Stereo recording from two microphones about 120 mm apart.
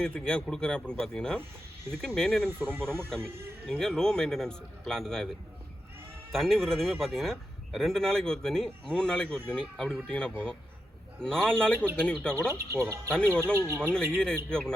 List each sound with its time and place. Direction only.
0.0 s speech: 10° left (ahead or behind)
2.5 s speech: 15° right (ahead or behind)
3.7 s speech: 5° left (ahead or behind)
12.5 s speech: 20° right (ahead or behind)
13.1 s speech: 10° left (ahead or behind)
13.4 s speech: 20° right (ahead or behind)
13.9 s speech: 5° left (ahead or behind)